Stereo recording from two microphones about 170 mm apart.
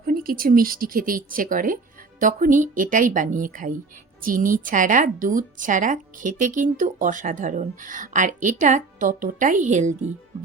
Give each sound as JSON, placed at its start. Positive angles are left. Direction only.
{"t": 0.0, "sound": "a woman's voice", "side_deg": -60}